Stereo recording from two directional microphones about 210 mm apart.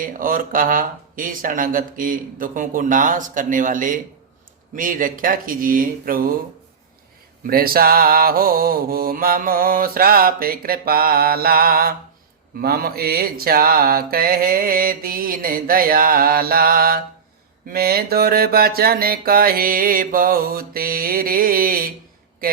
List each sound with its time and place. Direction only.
0.0 s speech: 40° right (ahead or behind)
7.5 s mantra: 45° right (ahead or behind)